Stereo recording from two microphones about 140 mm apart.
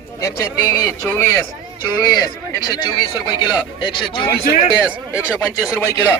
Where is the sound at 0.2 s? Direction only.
20° left (ahead or behind).